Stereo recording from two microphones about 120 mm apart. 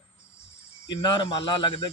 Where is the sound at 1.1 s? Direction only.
40° left (ahead or behind).